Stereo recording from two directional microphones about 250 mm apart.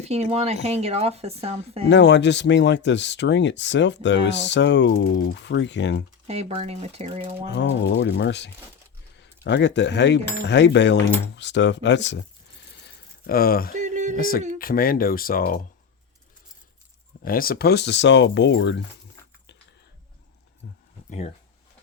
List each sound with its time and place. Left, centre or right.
0.0 s speech: right
1.9 s speech: left
6.2 s speech: right
7.4 s speech: left
12.7 s a sound: left
13.7 s a sound: right
14.2 s speech: left
17.2 s speech: left